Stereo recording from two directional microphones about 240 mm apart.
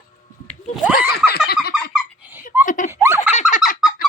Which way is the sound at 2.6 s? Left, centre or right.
Left.